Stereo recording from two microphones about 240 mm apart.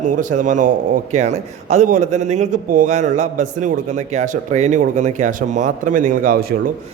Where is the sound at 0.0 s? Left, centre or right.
Right.